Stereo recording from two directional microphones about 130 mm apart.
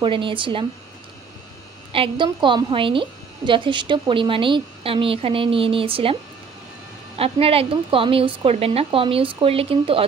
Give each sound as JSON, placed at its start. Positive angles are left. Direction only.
{"t": 0.0, "sound": "speech", "side_deg": -40}
{"t": 1.9, "sound": "a woman's voice", "side_deg": -40}
{"t": 7.2, "sound": "a woman's voice", "side_deg": -50}